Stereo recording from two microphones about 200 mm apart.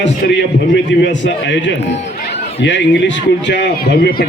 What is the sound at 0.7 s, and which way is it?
A man's voice, 60° left (ahead or behind).